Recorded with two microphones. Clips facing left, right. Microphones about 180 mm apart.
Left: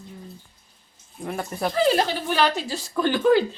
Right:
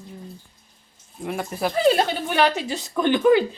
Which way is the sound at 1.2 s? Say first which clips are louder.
Right 2 dB; centre (ahead or behind).